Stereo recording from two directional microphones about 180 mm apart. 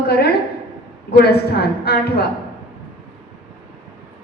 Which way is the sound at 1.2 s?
65° left (ahead or behind).